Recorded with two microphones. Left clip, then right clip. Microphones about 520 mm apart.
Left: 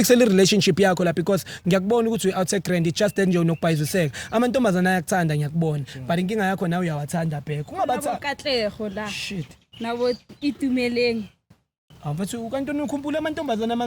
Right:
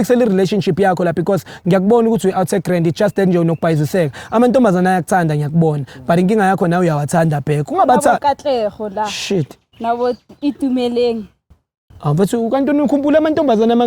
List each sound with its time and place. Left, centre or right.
0.0 s speech: centre; by 9.4 s right
9.8 s speech: right
12.0 s speech: right